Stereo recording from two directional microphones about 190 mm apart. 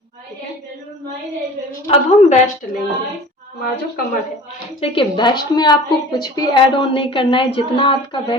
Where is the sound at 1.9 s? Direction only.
35° left (ahead or behind).